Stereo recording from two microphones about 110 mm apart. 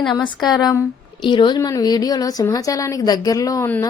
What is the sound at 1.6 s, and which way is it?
Speech, 35° left (ahead or behind).